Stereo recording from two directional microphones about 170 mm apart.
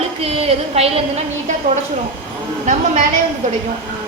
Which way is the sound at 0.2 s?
35° right (ahead or behind).